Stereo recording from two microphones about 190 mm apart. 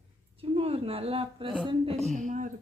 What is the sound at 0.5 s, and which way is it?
A woman's voice, 30° right (ahead or behind).